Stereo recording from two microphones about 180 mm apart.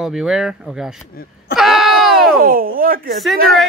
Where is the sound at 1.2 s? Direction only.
55° left (ahead or behind).